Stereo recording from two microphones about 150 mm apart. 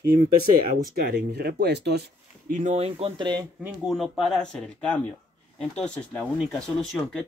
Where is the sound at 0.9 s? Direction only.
90° right; by 3.1 s 45° right (ahead or behind).